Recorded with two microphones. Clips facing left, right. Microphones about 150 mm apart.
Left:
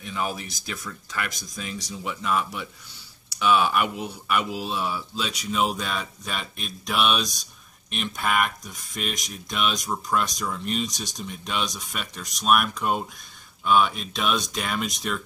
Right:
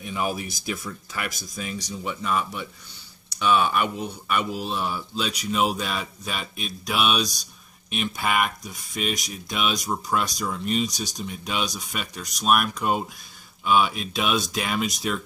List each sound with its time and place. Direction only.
0.0 s speech: 10° right (ahead or behind)